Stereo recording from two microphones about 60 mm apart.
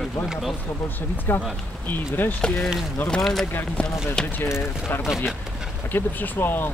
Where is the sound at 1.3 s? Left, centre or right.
Left.